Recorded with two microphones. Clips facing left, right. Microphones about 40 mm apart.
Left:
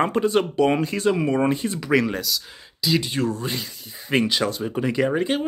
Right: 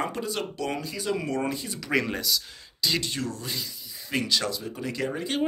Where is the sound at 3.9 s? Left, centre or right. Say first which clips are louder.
Left 6 dB; left.